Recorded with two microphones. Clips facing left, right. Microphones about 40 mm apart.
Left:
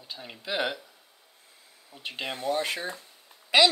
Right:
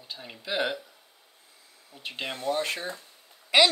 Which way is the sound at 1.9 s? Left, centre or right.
Centre.